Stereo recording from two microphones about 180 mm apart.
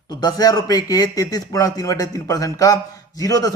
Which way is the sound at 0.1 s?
20° left (ahead or behind).